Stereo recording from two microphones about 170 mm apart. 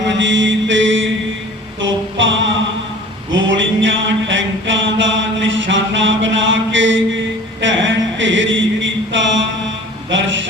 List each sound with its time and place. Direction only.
0.0 s mantra: 90° right
1.8 s music: 90° right
3.3 s mantra: 90° right
10.1 s music: 90° right